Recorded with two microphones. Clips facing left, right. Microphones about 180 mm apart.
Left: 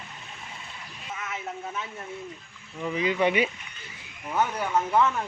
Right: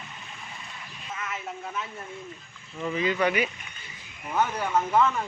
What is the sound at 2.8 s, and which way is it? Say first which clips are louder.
Speech: left 1 dB; 15° left (ahead or behind).